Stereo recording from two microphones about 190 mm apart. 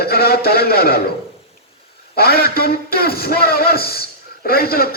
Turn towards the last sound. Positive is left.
turn(degrees=50)  # may be behind; listen again after turning